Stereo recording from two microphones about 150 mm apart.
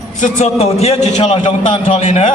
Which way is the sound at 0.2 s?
50° left (ahead or behind).